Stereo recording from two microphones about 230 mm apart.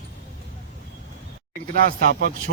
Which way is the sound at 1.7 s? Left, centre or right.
Right.